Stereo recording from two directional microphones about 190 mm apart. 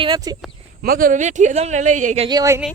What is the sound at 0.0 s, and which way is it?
Speech, 25° right (ahead or behind).